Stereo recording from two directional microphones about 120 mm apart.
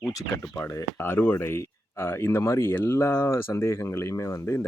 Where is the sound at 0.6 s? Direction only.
30° left (ahead or behind).